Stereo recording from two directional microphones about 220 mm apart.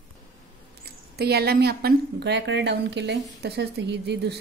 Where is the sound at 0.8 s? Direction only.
45° right (ahead or behind).